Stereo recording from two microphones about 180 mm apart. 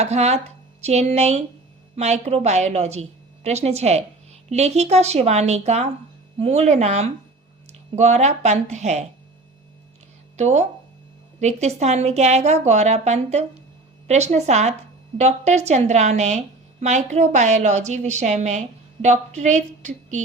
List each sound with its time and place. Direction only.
0.0 s a woman's voice: 35° right (ahead or behind)
10.3 s a woman's voice: 40° right (ahead or behind)